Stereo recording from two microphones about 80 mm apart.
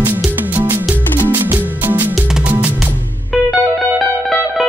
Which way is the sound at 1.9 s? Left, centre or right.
Right.